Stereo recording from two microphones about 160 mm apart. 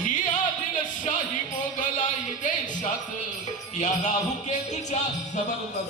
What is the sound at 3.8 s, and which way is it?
Music, 50° left (ahead or behind).